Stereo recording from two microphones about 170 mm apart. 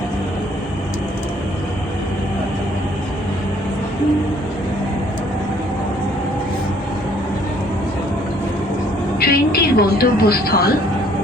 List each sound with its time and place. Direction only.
9.1 s television: 65° left (ahead or behind)